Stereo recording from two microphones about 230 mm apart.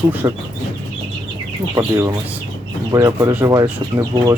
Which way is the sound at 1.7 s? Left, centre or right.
Centre.